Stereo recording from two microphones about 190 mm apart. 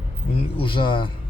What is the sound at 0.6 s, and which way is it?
Speech, 25° left (ahead or behind).